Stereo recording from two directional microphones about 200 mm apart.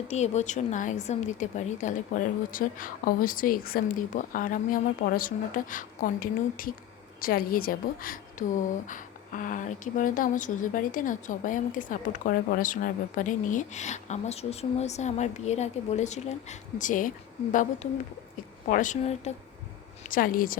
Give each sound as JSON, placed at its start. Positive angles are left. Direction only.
{"t": 0.1, "sound": "a woman's voice", "side_deg": 35}